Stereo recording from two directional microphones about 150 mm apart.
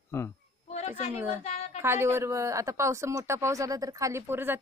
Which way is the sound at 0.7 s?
45° left (ahead or behind).